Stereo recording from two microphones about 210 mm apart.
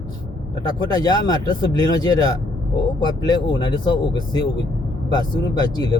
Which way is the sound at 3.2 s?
20° left (ahead or behind).